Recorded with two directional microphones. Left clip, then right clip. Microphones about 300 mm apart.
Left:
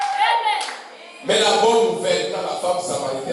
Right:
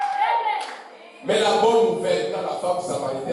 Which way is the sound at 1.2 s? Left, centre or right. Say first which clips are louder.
Left 2 dB; centre.